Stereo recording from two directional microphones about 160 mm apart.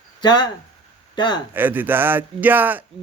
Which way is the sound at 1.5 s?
10° right (ahead or behind).